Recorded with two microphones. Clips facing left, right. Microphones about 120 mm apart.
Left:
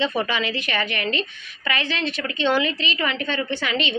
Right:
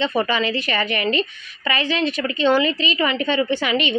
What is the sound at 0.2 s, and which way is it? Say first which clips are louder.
A woman's voice: right 4 dB; centre (ahead or behind).